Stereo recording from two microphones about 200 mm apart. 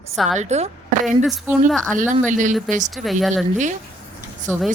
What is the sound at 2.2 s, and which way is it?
Speech, 40° right (ahead or behind).